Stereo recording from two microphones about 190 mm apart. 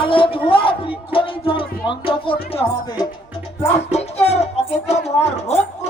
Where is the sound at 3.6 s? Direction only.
35° left (ahead or behind).